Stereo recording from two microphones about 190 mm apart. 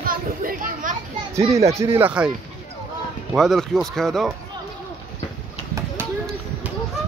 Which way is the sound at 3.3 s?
Centre (ahead or behind).